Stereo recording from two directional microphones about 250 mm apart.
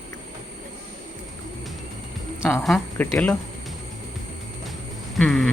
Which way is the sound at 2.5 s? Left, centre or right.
Centre.